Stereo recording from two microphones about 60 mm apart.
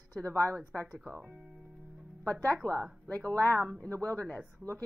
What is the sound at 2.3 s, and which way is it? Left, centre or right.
Speech, left.